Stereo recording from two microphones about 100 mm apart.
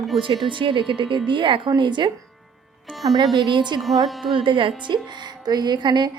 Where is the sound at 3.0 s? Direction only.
40° right (ahead or behind).